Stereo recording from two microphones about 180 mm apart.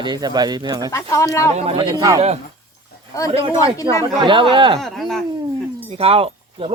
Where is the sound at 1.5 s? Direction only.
35° right (ahead or behind).